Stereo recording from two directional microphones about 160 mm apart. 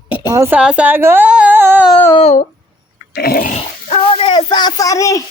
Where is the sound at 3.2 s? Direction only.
70° left (ahead or behind).